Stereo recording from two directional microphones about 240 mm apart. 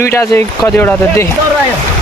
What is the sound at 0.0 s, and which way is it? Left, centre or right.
Speech, centre.